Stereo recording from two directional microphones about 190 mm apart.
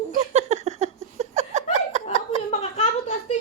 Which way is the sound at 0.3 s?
35° right (ahead or behind).